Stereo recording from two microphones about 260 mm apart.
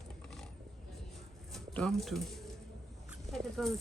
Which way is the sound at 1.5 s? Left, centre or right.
Centre.